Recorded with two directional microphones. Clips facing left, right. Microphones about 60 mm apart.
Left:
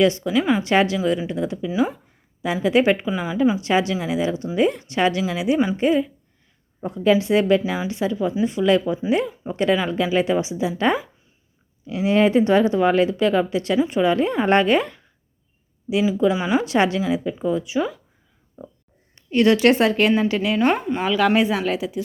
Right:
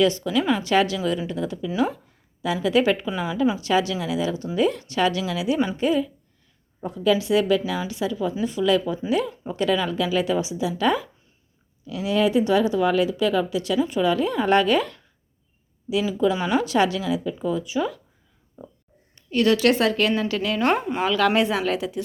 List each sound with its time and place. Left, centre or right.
0.0 s a woman's voice: left
0.3 s speech: centre
0.6 s a woman's voice: left
1.6 s speech: centre
2.4 s a woman's voice: left
3.1 s a woman's voice: centre
3.6 s a woman's voice: left
9.2 s speech: centre
9.5 s a woman's voice: left
16.3 s speech: centre
16.6 s a woman's voice: left
20.4 s a woman's voice: centre